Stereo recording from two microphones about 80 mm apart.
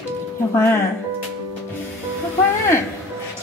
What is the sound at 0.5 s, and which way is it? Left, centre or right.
Speech, left.